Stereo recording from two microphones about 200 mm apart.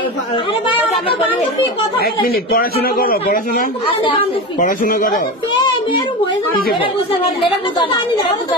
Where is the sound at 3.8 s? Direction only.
25° left (ahead or behind).